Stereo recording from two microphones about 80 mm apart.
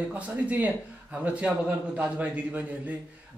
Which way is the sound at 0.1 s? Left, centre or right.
Centre.